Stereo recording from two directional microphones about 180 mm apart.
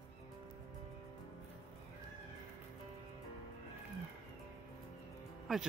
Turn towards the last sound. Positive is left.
turn(degrees=0)  # may be behind; listen again after turning